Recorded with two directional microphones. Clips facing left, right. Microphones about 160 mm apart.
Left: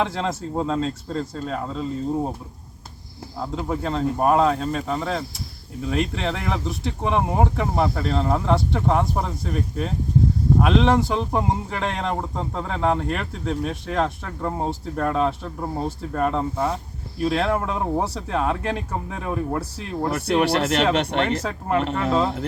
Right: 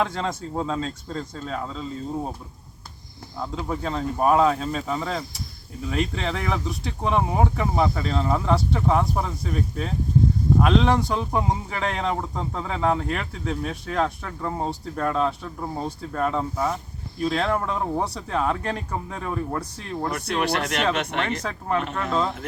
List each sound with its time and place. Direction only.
0.0 s speech: centre (ahead or behind)
3.3 s speech: 5° left (ahead or behind)
20.0 s speech: 30° left (ahead or behind)
21.4 s speech: 5° left (ahead or behind)